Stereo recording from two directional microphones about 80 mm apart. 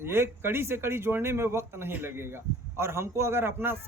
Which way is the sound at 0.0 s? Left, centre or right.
Right.